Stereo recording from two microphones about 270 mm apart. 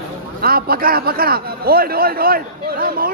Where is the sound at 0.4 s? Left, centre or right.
Right.